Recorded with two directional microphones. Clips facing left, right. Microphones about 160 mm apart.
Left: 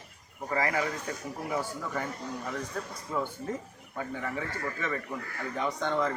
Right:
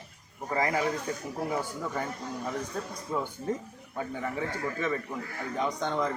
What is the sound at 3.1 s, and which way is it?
Speech, 20° right (ahead or behind).